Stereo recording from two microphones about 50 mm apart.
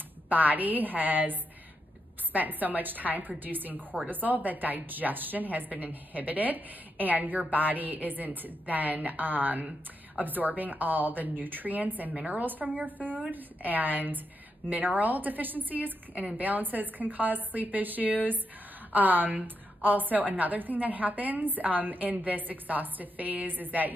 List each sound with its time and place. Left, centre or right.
0.3 s a woman's voice: right